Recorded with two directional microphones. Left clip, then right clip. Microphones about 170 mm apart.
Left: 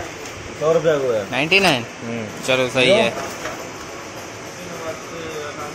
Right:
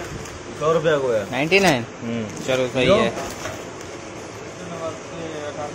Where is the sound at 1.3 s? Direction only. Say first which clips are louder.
Left 2 dB; 15° right (ahead or behind).